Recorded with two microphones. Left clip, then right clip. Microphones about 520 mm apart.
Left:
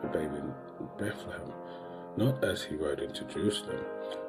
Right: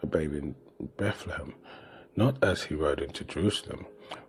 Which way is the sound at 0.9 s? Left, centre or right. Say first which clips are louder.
Right 5 dB; right.